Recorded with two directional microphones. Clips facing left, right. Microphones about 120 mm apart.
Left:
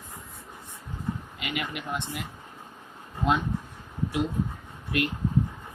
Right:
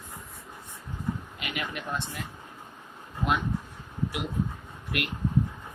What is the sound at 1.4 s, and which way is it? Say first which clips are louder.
Speech: left 2 dB; 20° left (ahead or behind).